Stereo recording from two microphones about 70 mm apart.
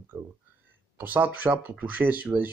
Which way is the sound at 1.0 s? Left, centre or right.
Right.